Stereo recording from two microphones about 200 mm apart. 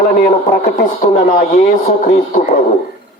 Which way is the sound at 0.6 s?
35° left (ahead or behind).